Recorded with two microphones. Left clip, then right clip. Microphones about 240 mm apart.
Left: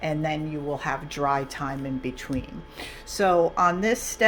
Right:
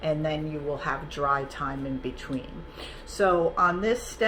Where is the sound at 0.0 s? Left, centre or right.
Left.